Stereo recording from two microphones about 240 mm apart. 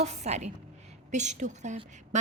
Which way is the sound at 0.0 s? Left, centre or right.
Right.